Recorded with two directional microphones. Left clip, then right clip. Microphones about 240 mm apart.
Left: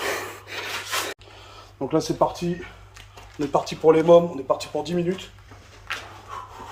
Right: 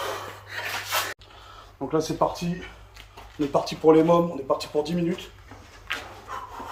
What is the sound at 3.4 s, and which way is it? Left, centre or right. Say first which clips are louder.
Speech: left 1 dB; centre.